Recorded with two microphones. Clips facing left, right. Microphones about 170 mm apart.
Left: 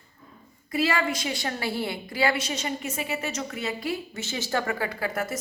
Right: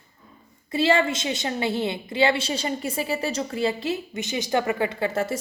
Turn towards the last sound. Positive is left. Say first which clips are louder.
# right 5 dB
turn(degrees=-25)  # may be behind; listen again after turning